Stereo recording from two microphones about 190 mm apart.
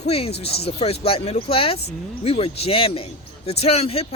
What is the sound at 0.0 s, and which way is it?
A man's voice, 30° left (ahead or behind).